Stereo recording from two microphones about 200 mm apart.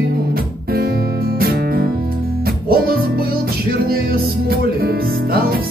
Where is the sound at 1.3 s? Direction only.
50° right (ahead or behind).